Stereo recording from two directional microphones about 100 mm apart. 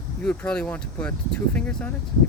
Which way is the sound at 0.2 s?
10° left (ahead or behind).